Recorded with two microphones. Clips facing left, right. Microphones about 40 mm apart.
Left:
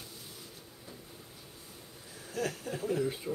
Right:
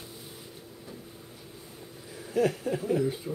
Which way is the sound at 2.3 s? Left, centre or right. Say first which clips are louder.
Right 9 dB; centre.